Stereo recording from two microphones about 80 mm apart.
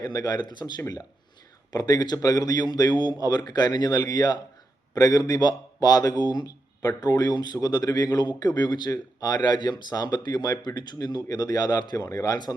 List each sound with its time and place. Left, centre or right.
0.0 s a man's voice: left